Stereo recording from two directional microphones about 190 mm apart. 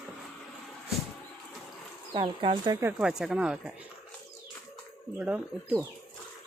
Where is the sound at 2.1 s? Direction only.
30° right (ahead or behind).